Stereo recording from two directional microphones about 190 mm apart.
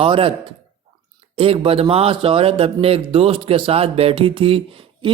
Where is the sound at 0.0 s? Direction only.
30° right (ahead or behind).